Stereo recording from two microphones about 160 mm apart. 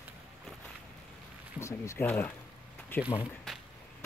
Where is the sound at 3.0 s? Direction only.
10° right (ahead or behind).